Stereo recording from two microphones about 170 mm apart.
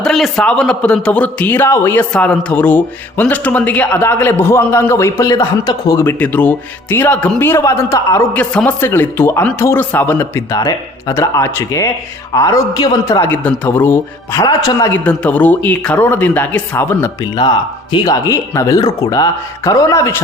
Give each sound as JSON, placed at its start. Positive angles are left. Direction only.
{"t": 0.0, "sound": "a man's voice", "side_deg": 0}
{"t": 14.4, "sound": "speech", "side_deg": 20}
{"t": 15.0, "sound": "a man's voice", "side_deg": 10}
{"t": 17.4, "sound": "speech", "side_deg": 25}